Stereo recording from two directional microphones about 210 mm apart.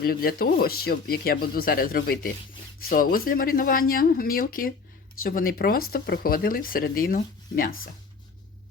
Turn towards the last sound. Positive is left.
turn(degrees=40)  # may be behind; listen again after turning